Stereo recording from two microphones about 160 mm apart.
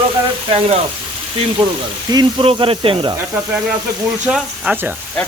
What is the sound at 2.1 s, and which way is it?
Speech, 30° right (ahead or behind).